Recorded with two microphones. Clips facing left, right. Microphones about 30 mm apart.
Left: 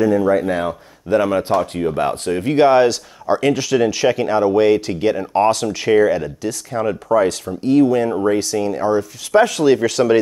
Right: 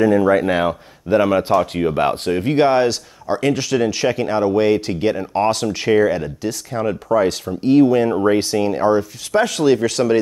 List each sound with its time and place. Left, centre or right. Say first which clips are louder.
0.0 s speech: right 1 dB; right
0.5 s speech: right 2 dB; right
1.0 s speech: right 1 dB; centre
2.3 s speech: left 4 dB; centre
7.2 s speech: right 1 dB; right
8.4 s speech: right 2 dB; right
9.3 s speech: left 2 dB; centre